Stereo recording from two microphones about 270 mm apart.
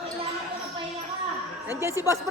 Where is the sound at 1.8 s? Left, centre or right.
Centre.